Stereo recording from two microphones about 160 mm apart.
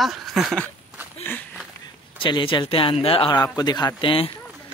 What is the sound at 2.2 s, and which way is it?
Speech, 30° left (ahead or behind).